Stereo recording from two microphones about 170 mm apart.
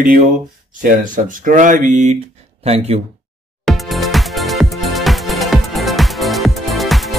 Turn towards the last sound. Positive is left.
turn(degrees=0)  # may be behind; listen again after turning